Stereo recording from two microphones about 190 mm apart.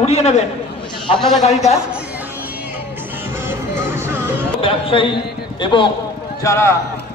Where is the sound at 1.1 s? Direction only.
Centre (ahead or behind).